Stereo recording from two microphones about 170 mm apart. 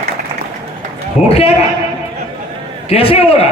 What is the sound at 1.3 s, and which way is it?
Speech, 35° left (ahead or behind).